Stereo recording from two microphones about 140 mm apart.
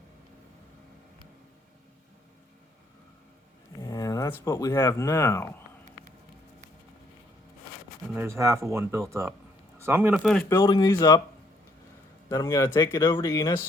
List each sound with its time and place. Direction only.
3.8 s a sound: 25° left (ahead or behind)
4.3 s speech: 25° left (ahead or behind)
8.1 s speech: 15° right (ahead or behind)
10.6 s speech: 30° left (ahead or behind)
12.3 s speech: 25° left (ahead or behind)